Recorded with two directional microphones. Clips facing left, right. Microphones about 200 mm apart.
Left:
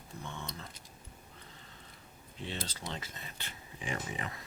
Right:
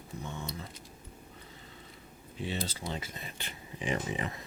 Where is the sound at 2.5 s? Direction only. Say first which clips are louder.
Right 4 dB; 10° right (ahead or behind).